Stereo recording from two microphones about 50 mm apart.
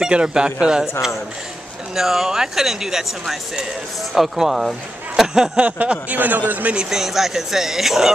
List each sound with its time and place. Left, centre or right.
0.0 s speech: centre
2.0 s speech: centre
5.6 s a man's voice: right
6.8 s speech: centre